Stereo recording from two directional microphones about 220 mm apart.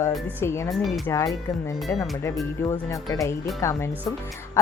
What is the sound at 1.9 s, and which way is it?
A woman's voice, 10° left (ahead or behind).